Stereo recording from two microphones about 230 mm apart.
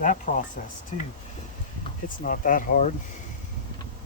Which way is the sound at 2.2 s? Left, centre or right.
Left.